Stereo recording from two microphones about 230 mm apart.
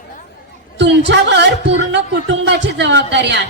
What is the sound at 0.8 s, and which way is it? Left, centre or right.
Speech, right.